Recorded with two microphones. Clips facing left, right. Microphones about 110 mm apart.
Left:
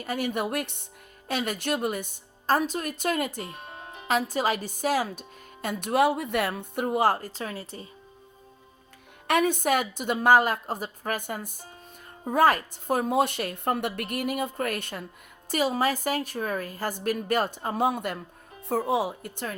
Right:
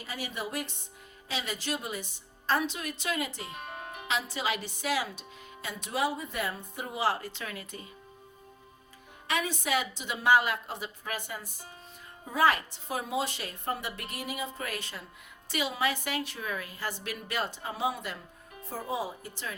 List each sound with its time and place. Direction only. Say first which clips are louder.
0.0 s a woman's voice: left 9 dB; 55° left (ahead or behind)
3.7 s music: right 1 dB; 25° left (ahead or behind)
4.1 s a woman's voice: left 7 dB; 45° left (ahead or behind)
5.6 s a woman's voice: left 8 dB; 60° left (ahead or behind); by 7.9 s 35° left (ahead or behind)
9.2 s a woman's voice: left 8 dB; 55° left (ahead or behind)
15.4 s a woman's voice: left 6 dB; 40° left (ahead or behind)
18.6 s speech: left 8 dB; 70° left (ahead or behind)